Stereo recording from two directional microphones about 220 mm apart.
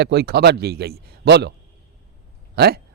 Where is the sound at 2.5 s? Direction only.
45° right (ahead or behind).